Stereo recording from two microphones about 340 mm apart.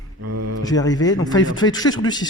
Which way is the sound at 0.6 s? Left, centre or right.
Centre.